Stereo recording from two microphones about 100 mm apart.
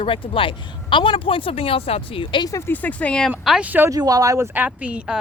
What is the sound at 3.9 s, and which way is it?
Speech, 35° right (ahead or behind).